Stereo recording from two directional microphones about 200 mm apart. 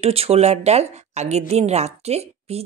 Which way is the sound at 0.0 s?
30° right (ahead or behind).